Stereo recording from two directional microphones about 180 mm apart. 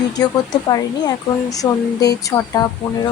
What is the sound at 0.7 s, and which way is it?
Speech, 20° left (ahead or behind).